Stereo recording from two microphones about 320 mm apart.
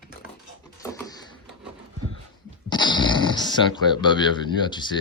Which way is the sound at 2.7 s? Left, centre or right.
Centre.